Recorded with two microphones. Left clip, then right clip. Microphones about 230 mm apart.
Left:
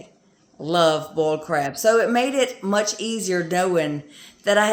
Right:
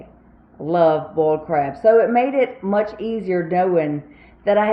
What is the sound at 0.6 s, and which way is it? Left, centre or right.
Speech, centre.